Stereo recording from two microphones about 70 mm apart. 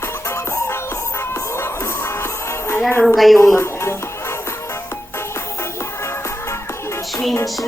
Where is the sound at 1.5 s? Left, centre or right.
Left.